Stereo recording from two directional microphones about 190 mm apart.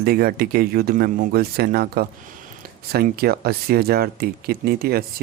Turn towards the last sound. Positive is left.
turn(degrees=-55)  # may be behind; listen again after turning